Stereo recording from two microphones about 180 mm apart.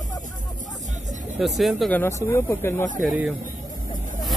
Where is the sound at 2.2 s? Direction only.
15° left (ahead or behind).